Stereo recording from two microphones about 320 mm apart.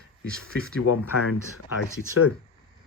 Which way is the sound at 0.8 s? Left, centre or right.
Left.